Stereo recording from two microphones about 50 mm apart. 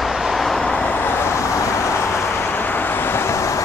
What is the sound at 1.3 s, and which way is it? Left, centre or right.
Vehicle, left.